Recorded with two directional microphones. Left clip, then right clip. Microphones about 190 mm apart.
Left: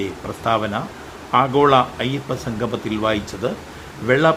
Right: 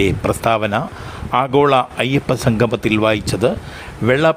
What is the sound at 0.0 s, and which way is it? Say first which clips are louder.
Speech: right 8 dB; 50° right (ahead or behind).